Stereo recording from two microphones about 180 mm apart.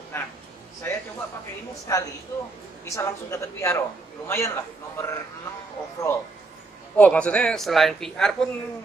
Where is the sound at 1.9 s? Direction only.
15° left (ahead or behind).